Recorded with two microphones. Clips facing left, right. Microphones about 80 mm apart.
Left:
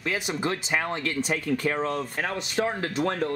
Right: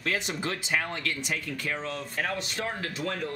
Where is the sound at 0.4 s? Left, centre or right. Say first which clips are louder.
Left 3 dB; left.